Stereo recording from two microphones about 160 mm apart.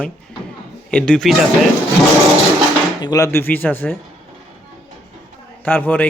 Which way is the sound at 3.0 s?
25° left (ahead or behind).